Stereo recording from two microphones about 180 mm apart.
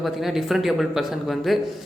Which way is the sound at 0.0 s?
Centre (ahead or behind).